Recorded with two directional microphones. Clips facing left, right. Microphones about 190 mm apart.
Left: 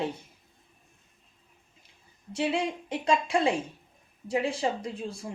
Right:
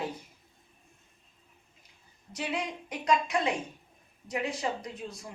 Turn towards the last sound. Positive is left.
turn(degrees=30)  # may be behind; listen again after turning